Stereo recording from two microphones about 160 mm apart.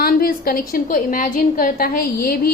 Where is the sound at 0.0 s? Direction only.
65° left (ahead or behind).